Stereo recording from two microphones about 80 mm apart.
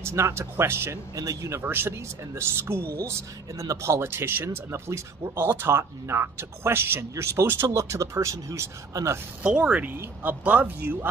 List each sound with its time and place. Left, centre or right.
0.0 s speech: right
1.1 s speech: right
1.6 s speech: right
9.4 s speech: centre